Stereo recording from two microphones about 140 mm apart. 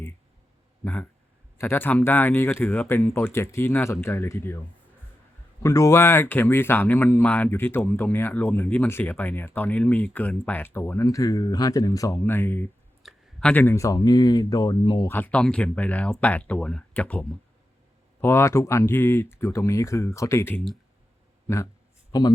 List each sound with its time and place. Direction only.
1.5 s speech: 15° left (ahead or behind)
5.6 s speech: 20° left (ahead or behind)
13.0 s a sound: centre (ahead or behind)
13.5 s speech: 15° left (ahead or behind); by 15.0 s 30° left (ahead or behind)
15.0 s speech: 15° left (ahead or behind); by 22.3 s 30° left (ahead or behind)